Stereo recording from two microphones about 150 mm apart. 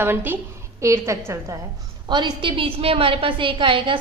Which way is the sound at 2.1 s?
30° right (ahead or behind).